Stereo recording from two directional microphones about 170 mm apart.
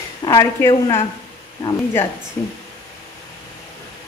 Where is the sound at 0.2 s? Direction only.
20° left (ahead or behind).